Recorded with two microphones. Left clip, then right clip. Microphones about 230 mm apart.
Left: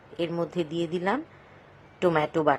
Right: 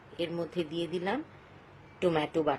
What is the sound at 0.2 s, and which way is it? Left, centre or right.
Speech, centre.